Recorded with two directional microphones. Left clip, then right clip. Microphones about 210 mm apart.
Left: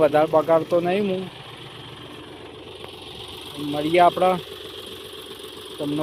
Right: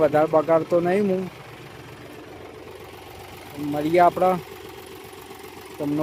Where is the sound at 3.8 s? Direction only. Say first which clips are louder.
Left 1 dB; 10° right (ahead or behind).